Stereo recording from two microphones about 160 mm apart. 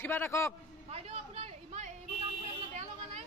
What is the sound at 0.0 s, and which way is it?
Speech, 15° left (ahead or behind).